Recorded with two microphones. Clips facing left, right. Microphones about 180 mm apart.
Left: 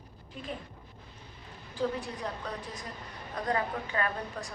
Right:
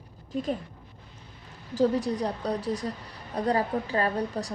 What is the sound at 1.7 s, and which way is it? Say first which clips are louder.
A woman's voice: right 9 dB; 40° right (ahead or behind).